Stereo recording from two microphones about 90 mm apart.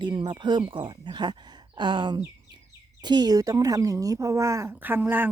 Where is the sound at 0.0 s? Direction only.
60° right (ahead or behind); by 4.8 s 35° right (ahead or behind).